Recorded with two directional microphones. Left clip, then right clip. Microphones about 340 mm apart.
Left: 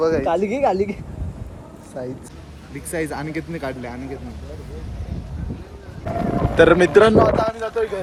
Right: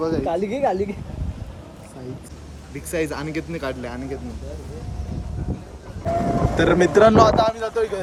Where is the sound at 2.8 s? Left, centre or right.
Centre.